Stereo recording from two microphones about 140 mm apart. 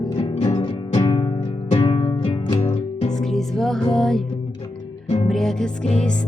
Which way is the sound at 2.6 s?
45° left (ahead or behind).